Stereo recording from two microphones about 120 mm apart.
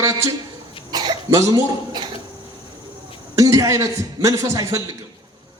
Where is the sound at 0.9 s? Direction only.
35° right (ahead or behind).